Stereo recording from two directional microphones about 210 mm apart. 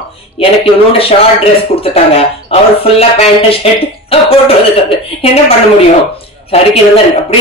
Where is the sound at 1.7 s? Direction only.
30° left (ahead or behind).